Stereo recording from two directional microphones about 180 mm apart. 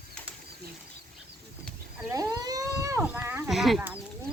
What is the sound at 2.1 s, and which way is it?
Speech, 20° right (ahead or behind).